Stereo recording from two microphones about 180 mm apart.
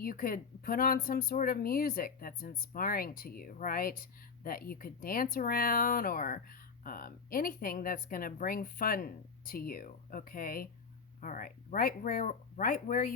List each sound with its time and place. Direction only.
0.0 s speech: 50° left (ahead or behind)